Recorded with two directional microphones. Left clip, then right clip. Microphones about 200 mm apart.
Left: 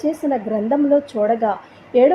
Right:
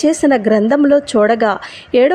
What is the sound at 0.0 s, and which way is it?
A woman's voice, 30° right (ahead or behind).